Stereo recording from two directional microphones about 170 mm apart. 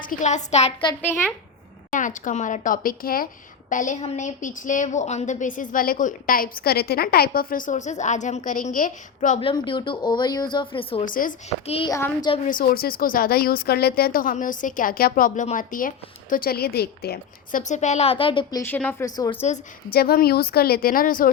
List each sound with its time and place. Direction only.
0.0 s a woman's voice: 50° left (ahead or behind)
1.9 s a woman's voice: 50° left (ahead or behind)
9.4 s speech: 30° left (ahead or behind)
11.0 s a woman's voice: 55° left (ahead or behind)
11.6 s a woman's voice: 35° left (ahead or behind)
11.9 s a child's voice: 20° left (ahead or behind)
12.5 s speech: 60° left (ahead or behind)
17.6 s a woman's voice: 45° left (ahead or behind)
18.6 s a child's voice: 10° left (ahead or behind)
19.0 s speech: 20° left (ahead or behind)
19.9 s speech: 65° left (ahead or behind)